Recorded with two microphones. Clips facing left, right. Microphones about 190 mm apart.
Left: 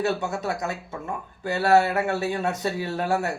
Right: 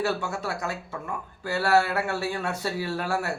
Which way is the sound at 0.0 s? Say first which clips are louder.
Left 2 dB; 20° left (ahead or behind).